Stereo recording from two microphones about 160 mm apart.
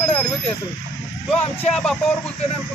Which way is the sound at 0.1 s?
5° left (ahead or behind).